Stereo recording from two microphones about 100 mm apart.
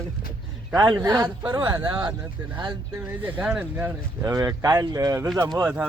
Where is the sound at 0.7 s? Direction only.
45° right (ahead or behind).